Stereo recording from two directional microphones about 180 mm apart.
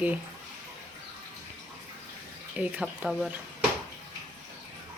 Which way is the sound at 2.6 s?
5° right (ahead or behind).